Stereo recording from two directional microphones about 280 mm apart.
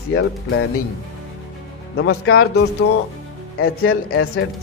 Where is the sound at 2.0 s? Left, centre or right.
Left.